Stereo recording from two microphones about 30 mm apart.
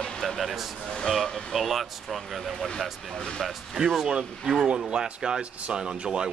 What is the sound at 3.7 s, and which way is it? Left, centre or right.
Speech, centre.